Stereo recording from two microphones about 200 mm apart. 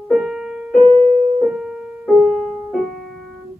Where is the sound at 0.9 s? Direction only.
25° right (ahead or behind).